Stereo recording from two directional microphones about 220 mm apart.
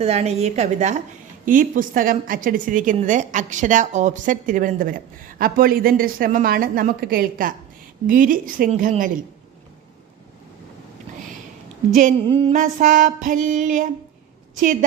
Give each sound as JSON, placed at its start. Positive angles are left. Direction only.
{"t": 0.0, "sound": "a woman's voice", "side_deg": -30}
{"t": 11.9, "sound": "a woman's voice", "side_deg": -35}